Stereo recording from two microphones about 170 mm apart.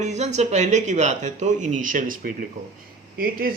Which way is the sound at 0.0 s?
40° right (ahead or behind).